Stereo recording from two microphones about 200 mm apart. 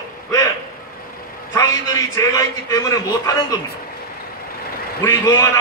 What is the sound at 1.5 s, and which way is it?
A man's voice, 15° left (ahead or behind).